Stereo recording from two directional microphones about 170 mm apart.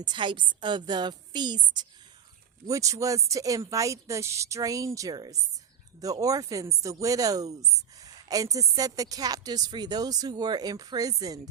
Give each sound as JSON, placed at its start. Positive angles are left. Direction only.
{"t": 0.0, "sound": "speech", "side_deg": -25}
{"t": 8.0, "sound": "a sound", "side_deg": -20}
{"t": 8.7, "sound": "speech", "side_deg": -20}